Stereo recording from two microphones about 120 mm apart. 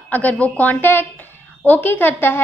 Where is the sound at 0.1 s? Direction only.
10° left (ahead or behind).